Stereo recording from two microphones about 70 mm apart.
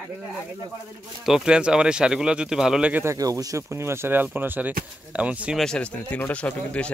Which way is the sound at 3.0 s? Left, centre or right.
Right.